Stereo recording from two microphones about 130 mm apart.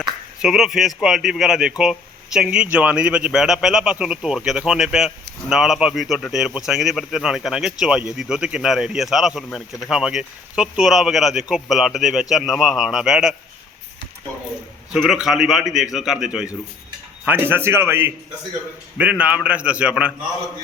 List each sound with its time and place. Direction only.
0.4 s speech: 5° right (ahead or behind)
14.9 s a man's voice: centre (ahead or behind)